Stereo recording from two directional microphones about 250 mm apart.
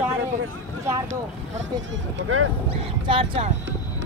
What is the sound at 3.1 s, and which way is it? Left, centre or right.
Speech, right.